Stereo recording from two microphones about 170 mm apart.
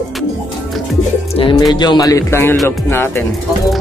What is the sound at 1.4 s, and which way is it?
Speech, 30° left (ahead or behind).